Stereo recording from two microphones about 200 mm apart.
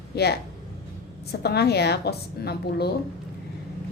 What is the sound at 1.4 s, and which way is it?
A woman's voice, 55° left (ahead or behind).